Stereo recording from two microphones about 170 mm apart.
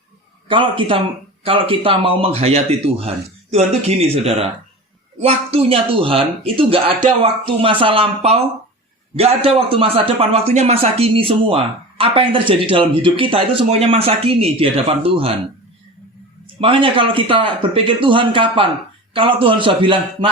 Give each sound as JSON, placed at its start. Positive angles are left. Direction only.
{"t": 0.4, "sound": "a man's voice", "side_deg": -30}
{"t": 16.6, "sound": "a man's voice", "side_deg": -30}